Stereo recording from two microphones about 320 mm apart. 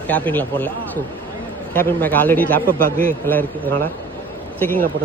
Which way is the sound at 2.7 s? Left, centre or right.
Right.